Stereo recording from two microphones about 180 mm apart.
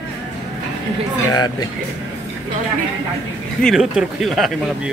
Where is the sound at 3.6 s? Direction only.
Centre (ahead or behind).